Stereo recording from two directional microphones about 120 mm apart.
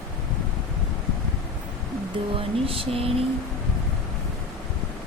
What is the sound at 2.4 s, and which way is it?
Speech, 50° right (ahead or behind).